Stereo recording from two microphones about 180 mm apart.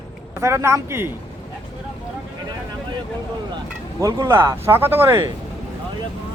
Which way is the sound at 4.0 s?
20° right (ahead or behind).